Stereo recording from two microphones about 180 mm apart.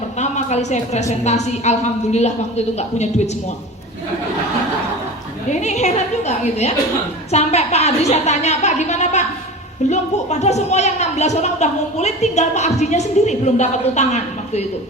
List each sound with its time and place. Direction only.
0.2 s a woman's voice: 40° left (ahead or behind)
5.5 s a woman's voice: 40° left (ahead or behind)